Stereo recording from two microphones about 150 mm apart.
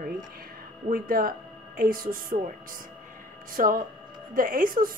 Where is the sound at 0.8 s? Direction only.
75° right (ahead or behind).